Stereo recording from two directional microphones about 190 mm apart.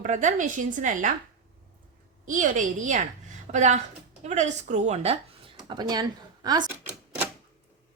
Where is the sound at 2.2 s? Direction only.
40° right (ahead or behind).